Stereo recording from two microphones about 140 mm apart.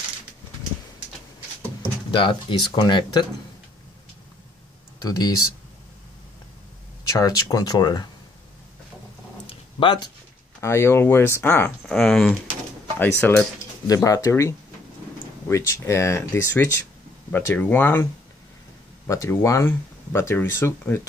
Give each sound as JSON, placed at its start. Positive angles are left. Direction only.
{"t": 2.0, "sound": "speech", "side_deg": 35}
{"t": 5.0, "sound": "speech", "side_deg": 30}
{"t": 7.1, "sound": "speech", "side_deg": 25}
{"t": 9.8, "sound": "speech", "side_deg": 35}
{"t": 10.6, "sound": "speech", "side_deg": 20}
{"t": 11.9, "sound": "speech", "side_deg": 0}
{"t": 13.0, "sound": "speech", "side_deg": 15}
{"t": 19.0, "sound": "speech", "side_deg": 20}